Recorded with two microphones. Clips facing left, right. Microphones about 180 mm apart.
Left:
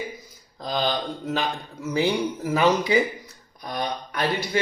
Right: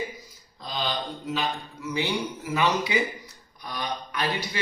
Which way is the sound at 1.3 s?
50° left (ahead or behind).